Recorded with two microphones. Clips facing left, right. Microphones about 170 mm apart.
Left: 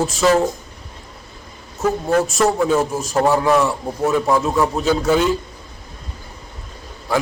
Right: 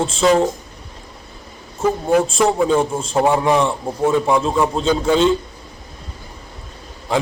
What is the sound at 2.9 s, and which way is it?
A man's voice, 30° right (ahead or behind).